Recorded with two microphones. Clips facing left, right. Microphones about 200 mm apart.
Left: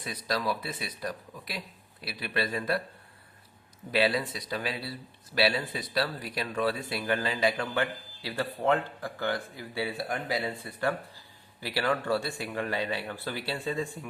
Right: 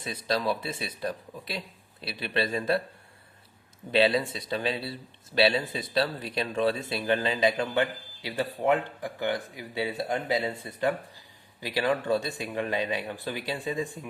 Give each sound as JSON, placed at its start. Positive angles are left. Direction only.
{"t": 0.0, "sound": "speech", "side_deg": -25}
{"t": 3.9, "sound": "speech", "side_deg": -25}